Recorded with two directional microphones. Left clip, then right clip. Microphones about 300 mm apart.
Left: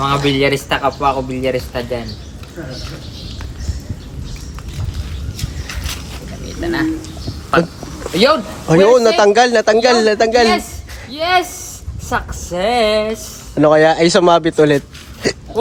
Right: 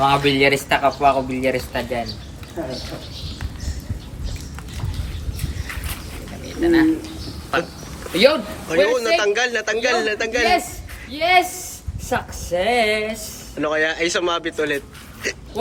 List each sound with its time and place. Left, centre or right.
0.0 s speech: centre
6.6 s speech: centre